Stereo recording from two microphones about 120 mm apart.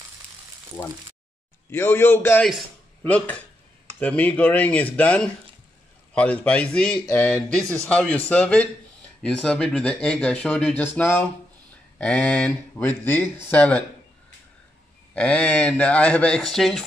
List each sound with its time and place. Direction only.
1.7 s a man's voice: 20° left (ahead or behind)
15.1 s speech: 10° left (ahead or behind)